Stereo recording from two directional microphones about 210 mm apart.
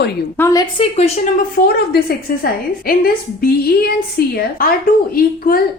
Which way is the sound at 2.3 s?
45° left (ahead or behind).